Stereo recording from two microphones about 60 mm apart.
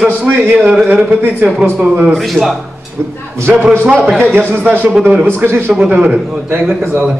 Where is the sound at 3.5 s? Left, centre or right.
Centre; by 5.6 s right.